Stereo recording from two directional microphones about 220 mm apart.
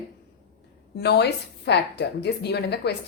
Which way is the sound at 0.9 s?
50° left (ahead or behind).